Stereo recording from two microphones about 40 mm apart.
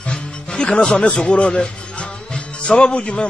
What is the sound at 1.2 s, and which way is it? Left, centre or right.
A man's voice, left.